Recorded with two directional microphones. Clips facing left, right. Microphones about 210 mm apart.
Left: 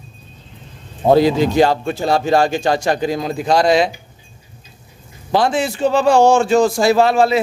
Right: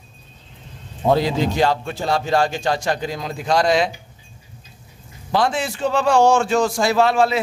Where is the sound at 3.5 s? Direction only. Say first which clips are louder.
Left 3 dB; 30° left (ahead or behind).